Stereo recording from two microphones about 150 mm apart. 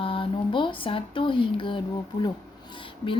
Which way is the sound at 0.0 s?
35° left (ahead or behind).